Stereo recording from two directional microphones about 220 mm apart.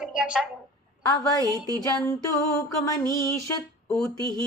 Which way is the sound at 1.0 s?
20° left (ahead or behind).